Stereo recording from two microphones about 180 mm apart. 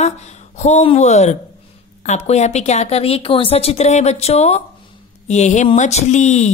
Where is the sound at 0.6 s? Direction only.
40° left (ahead or behind).